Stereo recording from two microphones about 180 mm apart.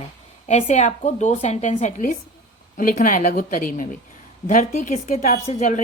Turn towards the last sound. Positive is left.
turn(degrees=45)  # may be behind; listen again after turning